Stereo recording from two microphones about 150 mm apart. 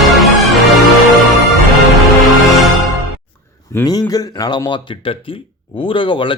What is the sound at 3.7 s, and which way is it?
A man's voice, 20° left (ahead or behind).